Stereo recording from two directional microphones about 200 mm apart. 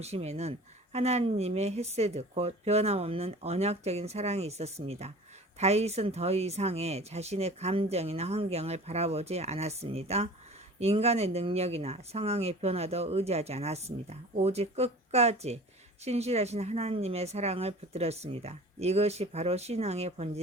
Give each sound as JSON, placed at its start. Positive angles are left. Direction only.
{"t": 0.0, "sound": "speech", "side_deg": -30}